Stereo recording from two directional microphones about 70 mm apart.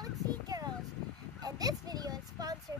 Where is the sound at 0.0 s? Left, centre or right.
Right.